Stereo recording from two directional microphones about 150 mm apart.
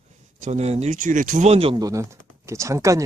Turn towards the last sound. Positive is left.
turn(degrees=-20)  # may be behind; listen again after turning